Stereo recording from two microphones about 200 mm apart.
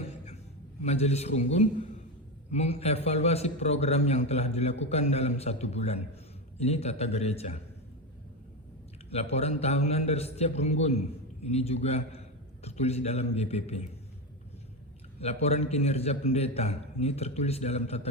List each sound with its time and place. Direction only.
0.8 s a man's voice: 35° left (ahead or behind)
9.0 s a man's voice: 30° left (ahead or behind)
15.2 s a man's voice: 30° left (ahead or behind)